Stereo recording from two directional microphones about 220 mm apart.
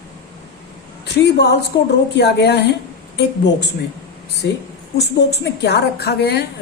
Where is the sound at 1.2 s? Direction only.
50° left (ahead or behind).